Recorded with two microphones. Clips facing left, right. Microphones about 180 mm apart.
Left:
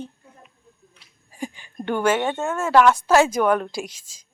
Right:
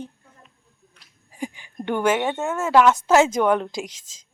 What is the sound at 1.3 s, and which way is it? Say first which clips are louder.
A woman's voice: even; 15° right (ahead or behind).